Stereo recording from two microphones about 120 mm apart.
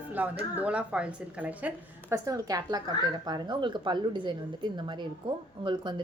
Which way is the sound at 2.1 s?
30° right (ahead or behind).